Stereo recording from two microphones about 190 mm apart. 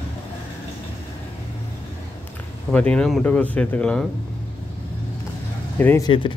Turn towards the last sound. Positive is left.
turn(degrees=10)  # may be behind; listen again after turning